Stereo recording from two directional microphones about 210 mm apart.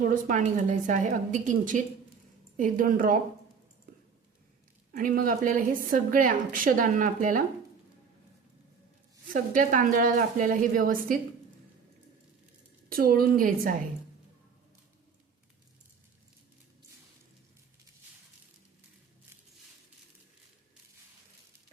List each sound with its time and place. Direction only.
0.0 s a woman's voice: 40° right (ahead or behind)
4.9 s a woman's voice: 40° right (ahead or behind)
9.3 s a woman's voice: 40° right (ahead or behind)
12.9 s a woman's voice: 45° right (ahead or behind)